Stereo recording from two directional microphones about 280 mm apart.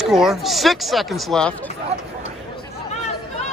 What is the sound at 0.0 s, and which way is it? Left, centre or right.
Speech, centre.